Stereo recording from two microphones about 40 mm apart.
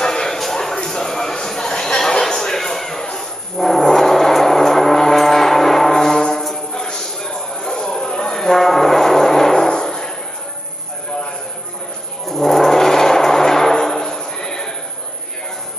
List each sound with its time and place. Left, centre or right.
0.0 s music: centre
0.4 s a sound: centre
3.2 s music: centre
12.3 s gong: centre